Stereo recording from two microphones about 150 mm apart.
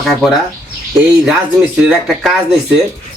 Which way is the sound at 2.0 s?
Centre (ahead or behind).